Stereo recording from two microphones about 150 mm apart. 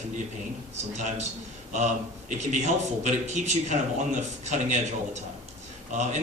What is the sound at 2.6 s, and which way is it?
Speech, 50° right (ahead or behind).